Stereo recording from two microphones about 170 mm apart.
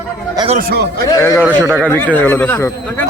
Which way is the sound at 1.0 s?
15° left (ahead or behind).